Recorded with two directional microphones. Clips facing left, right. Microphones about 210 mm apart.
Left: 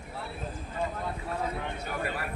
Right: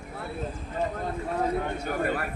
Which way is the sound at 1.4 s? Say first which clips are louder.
Right 9 dB; 50° right (ahead or behind).